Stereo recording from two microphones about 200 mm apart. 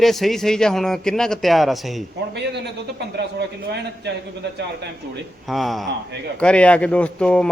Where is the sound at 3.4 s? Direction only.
55° right (ahead or behind).